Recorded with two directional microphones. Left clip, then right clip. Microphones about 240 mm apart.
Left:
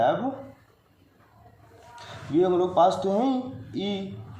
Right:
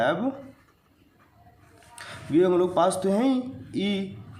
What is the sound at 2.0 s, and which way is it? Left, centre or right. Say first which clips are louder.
A man's voice: right 1 dB; right.